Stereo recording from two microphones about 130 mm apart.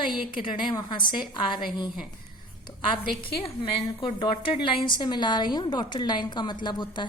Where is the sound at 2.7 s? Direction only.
35° left (ahead or behind).